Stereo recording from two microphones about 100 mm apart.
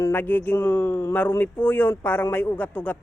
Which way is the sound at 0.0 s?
20° left (ahead or behind).